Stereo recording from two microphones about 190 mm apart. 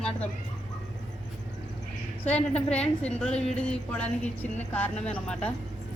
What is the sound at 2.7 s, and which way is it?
A woman's voice, 5° left (ahead or behind).